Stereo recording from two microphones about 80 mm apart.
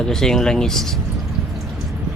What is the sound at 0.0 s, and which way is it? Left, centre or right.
Speech, centre.